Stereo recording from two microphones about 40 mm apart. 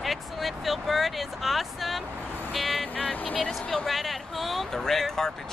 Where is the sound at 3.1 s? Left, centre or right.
Left.